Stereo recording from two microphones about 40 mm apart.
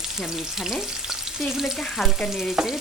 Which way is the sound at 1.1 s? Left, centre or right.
Centre.